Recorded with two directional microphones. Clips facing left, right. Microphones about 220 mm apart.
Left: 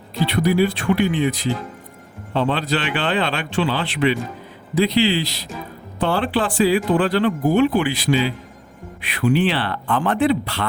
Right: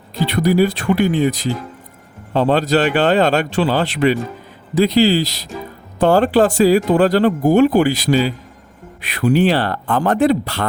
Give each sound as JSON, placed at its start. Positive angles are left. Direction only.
{"t": 0.3, "sound": "speech", "side_deg": -40}